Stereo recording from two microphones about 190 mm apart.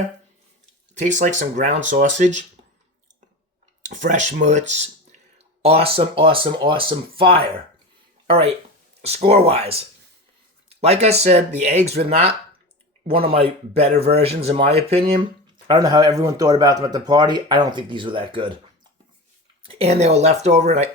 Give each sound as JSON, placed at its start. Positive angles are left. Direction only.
{"t": 0.9, "sound": "speech", "side_deg": -40}
{"t": 3.8, "sound": "speech", "side_deg": -40}
{"t": 19.6, "sound": "speech", "side_deg": -30}